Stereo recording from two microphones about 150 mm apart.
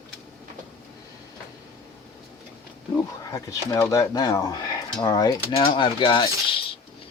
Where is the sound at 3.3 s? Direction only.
20° left (ahead or behind).